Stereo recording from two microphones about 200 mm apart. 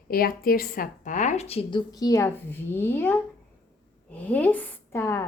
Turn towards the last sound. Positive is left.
turn(degrees=15)  # may be behind; listen again after turning